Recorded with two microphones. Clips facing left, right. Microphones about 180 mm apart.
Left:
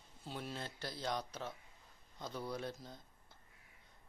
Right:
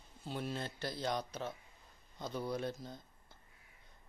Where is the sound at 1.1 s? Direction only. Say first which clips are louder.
Right 1 dB; 20° right (ahead or behind).